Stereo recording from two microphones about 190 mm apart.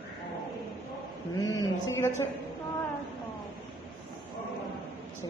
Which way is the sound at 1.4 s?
20° left (ahead or behind).